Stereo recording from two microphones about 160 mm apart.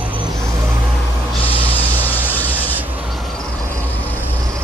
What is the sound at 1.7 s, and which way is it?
Vehicle, 10° left (ahead or behind).